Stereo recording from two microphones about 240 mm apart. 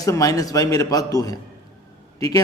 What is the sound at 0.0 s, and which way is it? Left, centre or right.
A man's voice, centre.